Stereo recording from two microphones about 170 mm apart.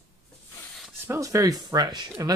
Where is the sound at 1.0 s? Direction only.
15° right (ahead or behind).